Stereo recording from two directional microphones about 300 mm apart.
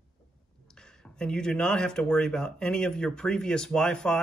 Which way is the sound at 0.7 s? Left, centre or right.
Centre.